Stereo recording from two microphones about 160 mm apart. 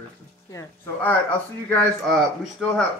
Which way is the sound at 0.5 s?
15° left (ahead or behind).